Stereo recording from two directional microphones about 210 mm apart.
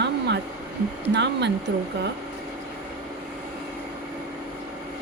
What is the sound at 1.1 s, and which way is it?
Speech, 55° right (ahead or behind).